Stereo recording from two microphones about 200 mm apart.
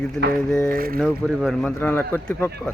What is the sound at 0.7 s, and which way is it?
Speech, 45° right (ahead or behind).